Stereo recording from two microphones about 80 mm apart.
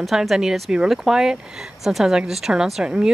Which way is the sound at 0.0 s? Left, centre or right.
Centre.